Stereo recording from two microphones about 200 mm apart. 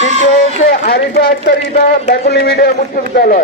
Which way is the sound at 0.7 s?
50° left (ahead or behind).